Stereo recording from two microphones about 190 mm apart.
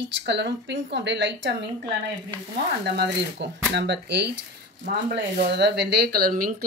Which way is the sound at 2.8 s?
60° right (ahead or behind).